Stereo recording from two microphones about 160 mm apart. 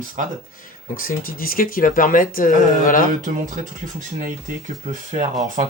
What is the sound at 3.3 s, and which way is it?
Speech, 55° right (ahead or behind).